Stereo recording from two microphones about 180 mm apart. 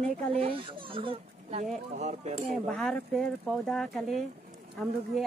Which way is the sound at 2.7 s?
5° left (ahead or behind).